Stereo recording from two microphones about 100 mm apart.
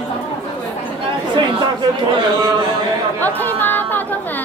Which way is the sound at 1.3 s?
50° right (ahead or behind).